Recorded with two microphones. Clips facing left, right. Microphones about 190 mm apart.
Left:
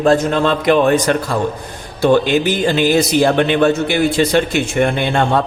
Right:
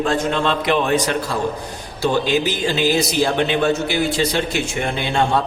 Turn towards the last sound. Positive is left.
turn(degrees=55)  # may be behind; listen again after turning